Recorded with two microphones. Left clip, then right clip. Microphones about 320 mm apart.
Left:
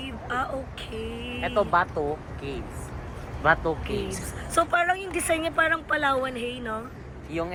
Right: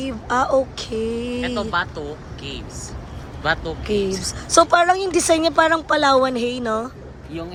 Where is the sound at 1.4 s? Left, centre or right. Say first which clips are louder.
Left 2 dB; centre.